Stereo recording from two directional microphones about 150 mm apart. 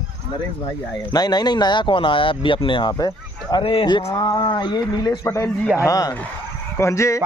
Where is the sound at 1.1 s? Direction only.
25° left (ahead or behind).